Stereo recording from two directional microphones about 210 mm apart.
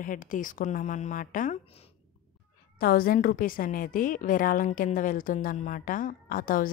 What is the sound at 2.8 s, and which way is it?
A woman's voice, 45° left (ahead or behind).